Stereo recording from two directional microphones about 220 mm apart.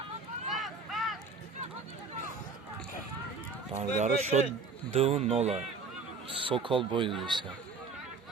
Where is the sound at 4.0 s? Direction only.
30° right (ahead or behind).